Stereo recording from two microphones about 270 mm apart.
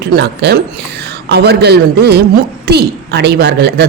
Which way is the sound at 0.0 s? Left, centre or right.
Right.